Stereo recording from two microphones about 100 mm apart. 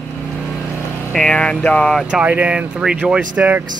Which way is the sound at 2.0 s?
10° right (ahead or behind).